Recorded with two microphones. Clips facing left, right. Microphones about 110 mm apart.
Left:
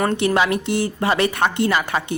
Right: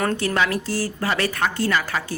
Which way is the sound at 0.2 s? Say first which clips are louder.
Left 4 dB; 20° left (ahead or behind).